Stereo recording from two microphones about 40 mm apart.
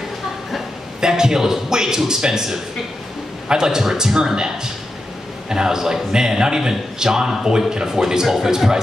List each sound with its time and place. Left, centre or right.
1.0 s a man's voice: centre
5.5 s a man's voice: centre